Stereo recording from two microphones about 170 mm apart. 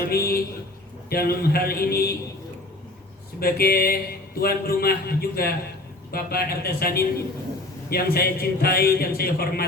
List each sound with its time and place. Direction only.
0.0 s a man's voice: 60° left (ahead or behind)
3.4 s a man's voice: 65° left (ahead or behind)